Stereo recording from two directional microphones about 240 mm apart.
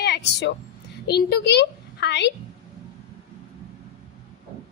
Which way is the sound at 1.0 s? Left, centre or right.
Left.